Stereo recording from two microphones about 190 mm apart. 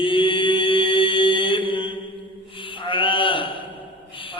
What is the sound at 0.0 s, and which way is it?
Mantra, 25° left (ahead or behind).